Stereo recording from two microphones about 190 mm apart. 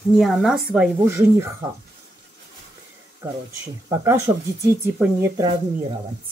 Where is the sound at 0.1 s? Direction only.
Centre (ahead or behind).